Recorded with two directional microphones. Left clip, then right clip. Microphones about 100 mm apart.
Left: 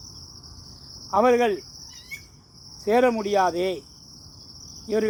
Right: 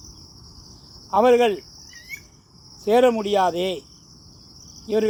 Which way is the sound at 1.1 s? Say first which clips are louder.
Right 3 dB; 30° right (ahead or behind).